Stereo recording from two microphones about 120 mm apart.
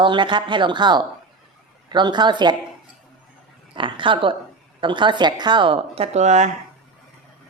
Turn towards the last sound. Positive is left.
turn(degrees=-75)  # may be behind; listen again after turning